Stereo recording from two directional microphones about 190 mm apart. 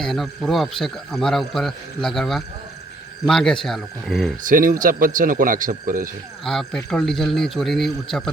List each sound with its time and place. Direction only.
0.0 s a man's voice: centre (ahead or behind)
4.4 s speech: 45° right (ahead or behind)
6.4 s a man's voice: centre (ahead or behind)